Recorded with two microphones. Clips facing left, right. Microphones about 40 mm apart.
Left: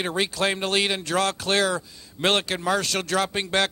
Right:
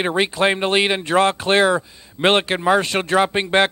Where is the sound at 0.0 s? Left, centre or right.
Right.